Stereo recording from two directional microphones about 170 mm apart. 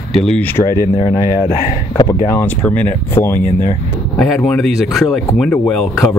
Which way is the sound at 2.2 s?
15° left (ahead or behind).